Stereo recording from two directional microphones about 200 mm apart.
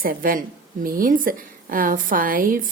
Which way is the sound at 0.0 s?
45° right (ahead or behind).